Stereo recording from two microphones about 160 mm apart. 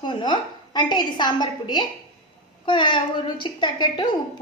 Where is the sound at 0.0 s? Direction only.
25° left (ahead or behind).